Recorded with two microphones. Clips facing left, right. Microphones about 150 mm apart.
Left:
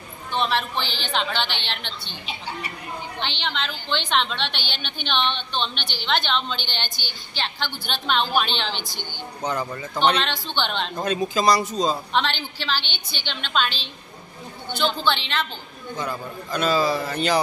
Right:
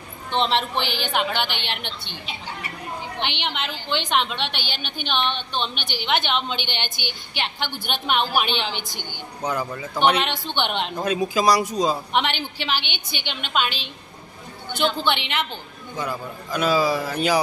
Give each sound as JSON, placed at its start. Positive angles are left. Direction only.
{"t": 0.3, "sound": "a woman's voice", "side_deg": -20}
{"t": 3.2, "sound": "a woman's voice", "side_deg": -15}
{"t": 15.0, "sound": "a woman's voice", "side_deg": -15}